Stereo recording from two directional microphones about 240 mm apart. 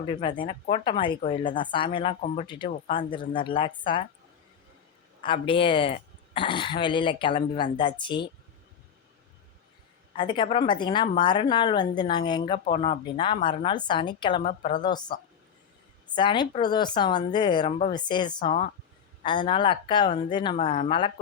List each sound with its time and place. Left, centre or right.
0.1 s speech: centre
5.2 s speech: left
10.2 s speech: centre